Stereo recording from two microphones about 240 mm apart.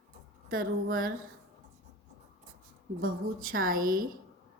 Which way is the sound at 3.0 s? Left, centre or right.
Right.